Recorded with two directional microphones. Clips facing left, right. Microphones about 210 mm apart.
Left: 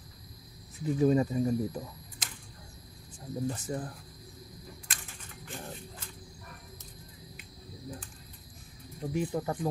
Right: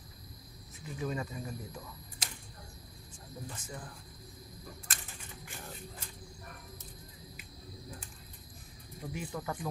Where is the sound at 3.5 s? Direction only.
35° left (ahead or behind).